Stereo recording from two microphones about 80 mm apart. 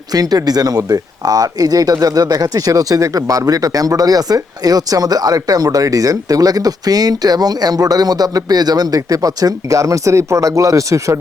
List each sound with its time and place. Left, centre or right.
0.1 s speech: right